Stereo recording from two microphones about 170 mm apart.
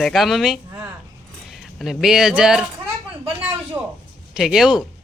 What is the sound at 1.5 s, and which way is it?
Speech, centre (ahead or behind).